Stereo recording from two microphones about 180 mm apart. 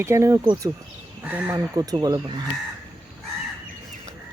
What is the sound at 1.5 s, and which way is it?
Speech, 20° right (ahead or behind).